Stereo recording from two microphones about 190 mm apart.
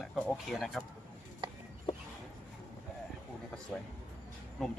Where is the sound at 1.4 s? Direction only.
25° right (ahead or behind).